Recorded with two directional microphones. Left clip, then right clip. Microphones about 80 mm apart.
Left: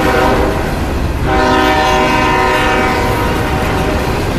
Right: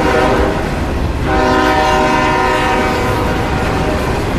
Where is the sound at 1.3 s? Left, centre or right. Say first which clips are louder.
Left 1 dB; centre.